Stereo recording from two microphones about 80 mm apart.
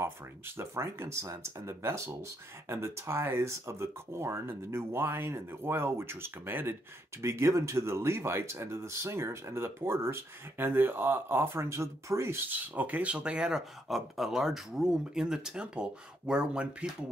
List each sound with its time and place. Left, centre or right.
0.6 s speech: right
12.4 s speech: right